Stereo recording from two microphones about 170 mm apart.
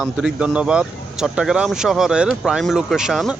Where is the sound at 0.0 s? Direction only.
5° right (ahead or behind).